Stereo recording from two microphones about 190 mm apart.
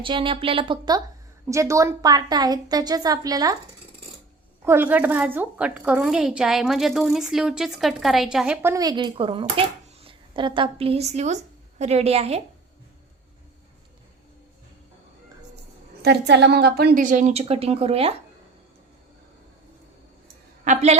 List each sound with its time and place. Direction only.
0.0 s a woman's voice: 25° right (ahead or behind)
4.6 s a woman's voice: 10° right (ahead or behind)
8.7 s a woman's voice: 20° right (ahead or behind)
16.0 s a woman's voice: 65° right (ahead or behind); by 18.1 s 30° right (ahead or behind)
20.7 s a woman's voice: 35° right (ahead or behind)